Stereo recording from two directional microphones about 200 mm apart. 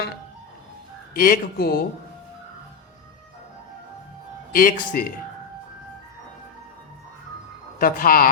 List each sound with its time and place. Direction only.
1.1 s speech: 45° left (ahead or behind)
4.5 s speech: 45° left (ahead or behind)
7.8 s speech: 45° left (ahead or behind)